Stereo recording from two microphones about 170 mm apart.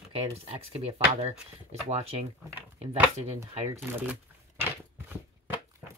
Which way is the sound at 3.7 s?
15° right (ahead or behind).